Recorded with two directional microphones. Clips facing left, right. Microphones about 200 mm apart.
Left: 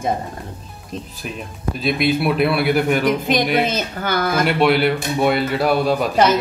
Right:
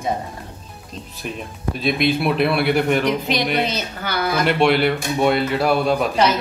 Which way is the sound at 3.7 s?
50° left (ahead or behind).